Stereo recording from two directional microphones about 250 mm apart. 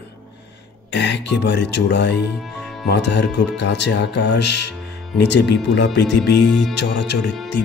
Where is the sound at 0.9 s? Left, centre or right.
Left.